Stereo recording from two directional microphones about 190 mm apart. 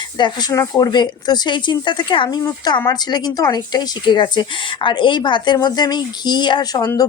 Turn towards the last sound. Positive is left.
turn(degrees=20)  # may be behind; listen again after turning